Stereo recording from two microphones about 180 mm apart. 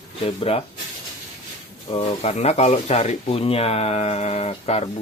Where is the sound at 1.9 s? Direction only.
35° left (ahead or behind).